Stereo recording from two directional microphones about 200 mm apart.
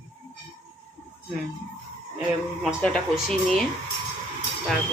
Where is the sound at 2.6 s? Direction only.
Centre (ahead or behind).